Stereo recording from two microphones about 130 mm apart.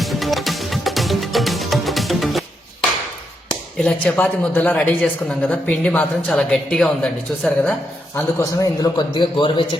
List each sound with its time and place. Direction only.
0.0 s music: centre (ahead or behind)
3.8 s a woman's voice: 10° left (ahead or behind)
8.5 s speech: 30° left (ahead or behind)